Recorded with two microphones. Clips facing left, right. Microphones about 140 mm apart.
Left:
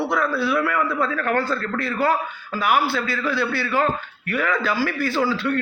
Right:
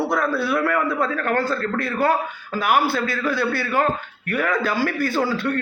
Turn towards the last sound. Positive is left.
turn(degrees=-50)  # may be behind; listen again after turning